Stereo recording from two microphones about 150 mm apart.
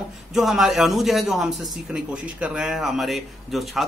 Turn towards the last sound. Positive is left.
turn(degrees=0)  # may be behind; listen again after turning